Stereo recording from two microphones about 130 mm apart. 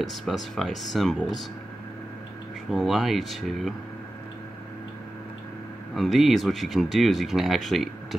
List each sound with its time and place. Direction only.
0.0 s speech: centre (ahead or behind)
2.7 s speech: centre (ahead or behind)
5.9 s speech: centre (ahead or behind)